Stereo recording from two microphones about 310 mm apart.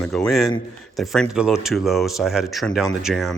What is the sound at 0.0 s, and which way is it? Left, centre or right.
Speech, centre.